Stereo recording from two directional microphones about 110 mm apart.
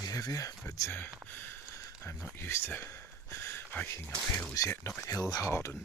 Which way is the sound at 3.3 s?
25° left (ahead or behind).